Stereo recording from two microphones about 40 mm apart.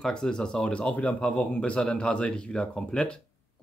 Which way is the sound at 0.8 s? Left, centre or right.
Left.